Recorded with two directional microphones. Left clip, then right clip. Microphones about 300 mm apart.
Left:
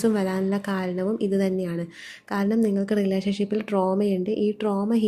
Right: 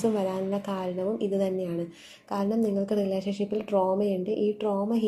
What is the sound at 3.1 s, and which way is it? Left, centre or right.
Speech, left.